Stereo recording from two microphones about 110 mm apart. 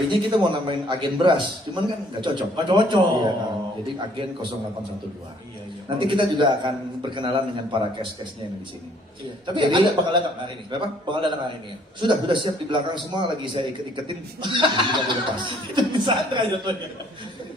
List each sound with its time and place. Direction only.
0.1 s speech: 45° right (ahead or behind)
6.0 s speech: 45° right (ahead or behind)
9.6 s speech: 45° right (ahead or behind)